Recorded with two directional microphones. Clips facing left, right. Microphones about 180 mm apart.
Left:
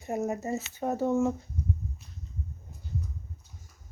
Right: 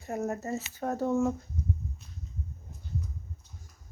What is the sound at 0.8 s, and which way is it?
Speech, centre (ahead or behind).